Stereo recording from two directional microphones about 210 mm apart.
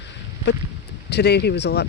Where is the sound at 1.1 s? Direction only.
50° left (ahead or behind).